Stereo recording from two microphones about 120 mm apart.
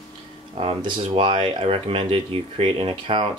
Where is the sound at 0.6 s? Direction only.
55° right (ahead or behind).